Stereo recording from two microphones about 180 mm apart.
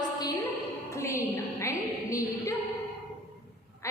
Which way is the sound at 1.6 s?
15° left (ahead or behind).